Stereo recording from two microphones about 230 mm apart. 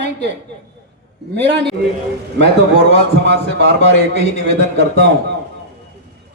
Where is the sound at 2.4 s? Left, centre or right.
Right.